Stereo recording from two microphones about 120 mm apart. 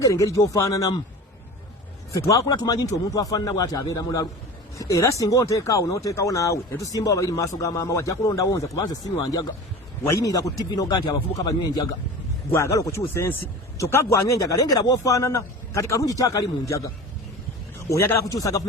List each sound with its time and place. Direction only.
0.0 s a man's voice: 25° left (ahead or behind)
2.2 s a man's voice: 25° left (ahead or behind)
12.5 s a man's voice: 25° left (ahead or behind)
17.8 s a man's voice: 20° left (ahead or behind)